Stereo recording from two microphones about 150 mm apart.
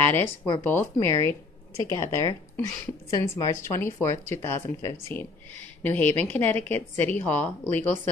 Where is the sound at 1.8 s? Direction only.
20° left (ahead or behind).